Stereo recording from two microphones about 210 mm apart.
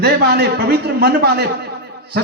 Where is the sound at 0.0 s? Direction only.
50° right (ahead or behind).